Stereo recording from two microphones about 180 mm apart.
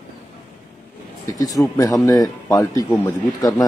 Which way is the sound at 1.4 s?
20° left (ahead or behind).